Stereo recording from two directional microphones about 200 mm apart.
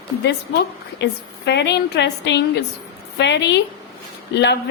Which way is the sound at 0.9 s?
60° left (ahead or behind).